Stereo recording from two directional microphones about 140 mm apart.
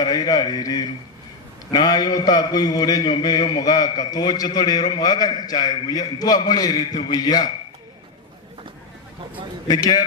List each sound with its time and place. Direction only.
0.0 s a man's voice: 30° left (ahead or behind)
9.7 s a man's voice: 30° left (ahead or behind)